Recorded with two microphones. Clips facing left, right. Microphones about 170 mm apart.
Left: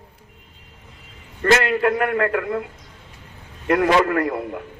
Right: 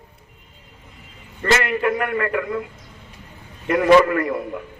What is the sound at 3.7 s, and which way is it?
Speech, 60° left (ahead or behind).